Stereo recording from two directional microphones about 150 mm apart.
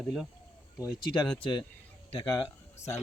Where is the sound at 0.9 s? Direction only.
30° left (ahead or behind).